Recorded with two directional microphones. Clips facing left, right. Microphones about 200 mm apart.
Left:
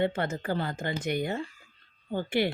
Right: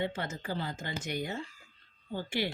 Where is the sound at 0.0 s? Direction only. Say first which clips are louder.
Left 7 dB; 60° left (ahead or behind).